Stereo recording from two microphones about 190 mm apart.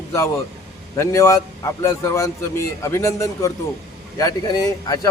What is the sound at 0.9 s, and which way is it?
A man's voice, 15° left (ahead or behind).